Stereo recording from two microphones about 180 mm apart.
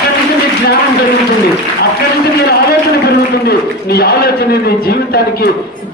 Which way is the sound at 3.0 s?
60° left (ahead or behind).